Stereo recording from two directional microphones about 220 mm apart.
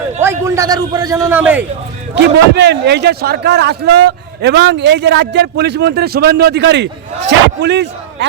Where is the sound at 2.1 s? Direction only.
50° right (ahead or behind).